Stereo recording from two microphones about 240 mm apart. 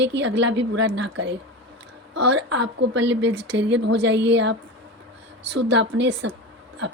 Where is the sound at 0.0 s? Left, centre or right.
Right.